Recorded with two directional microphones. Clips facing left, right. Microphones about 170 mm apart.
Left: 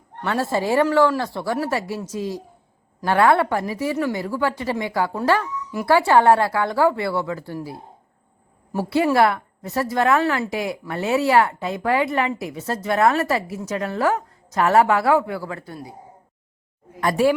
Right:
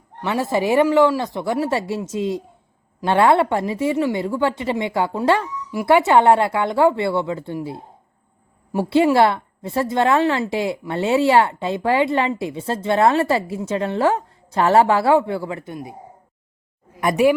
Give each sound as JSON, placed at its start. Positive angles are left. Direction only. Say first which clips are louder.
{"t": 0.2, "sound": "a woman's voice", "louder": "right 2 dB", "side_deg": -15}
{"t": 17.0, "sound": "a woman's voice", "louder": "right 2 dB", "side_deg": -20}